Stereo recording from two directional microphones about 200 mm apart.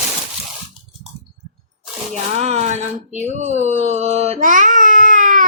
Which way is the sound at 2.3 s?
35° right (ahead or behind).